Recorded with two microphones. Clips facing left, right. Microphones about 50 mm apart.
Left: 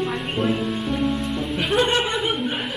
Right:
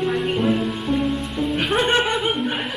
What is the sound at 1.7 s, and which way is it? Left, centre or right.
Chuckle, right.